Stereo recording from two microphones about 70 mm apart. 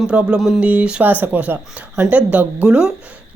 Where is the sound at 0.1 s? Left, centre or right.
Centre.